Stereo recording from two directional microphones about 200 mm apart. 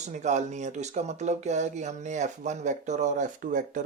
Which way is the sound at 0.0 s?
35° right (ahead or behind).